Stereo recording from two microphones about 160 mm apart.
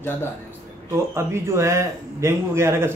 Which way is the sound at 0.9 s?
15° right (ahead or behind).